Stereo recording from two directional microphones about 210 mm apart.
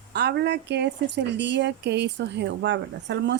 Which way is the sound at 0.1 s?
50° right (ahead or behind).